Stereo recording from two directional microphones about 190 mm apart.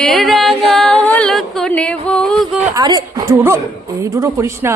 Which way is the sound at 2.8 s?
20° right (ahead or behind).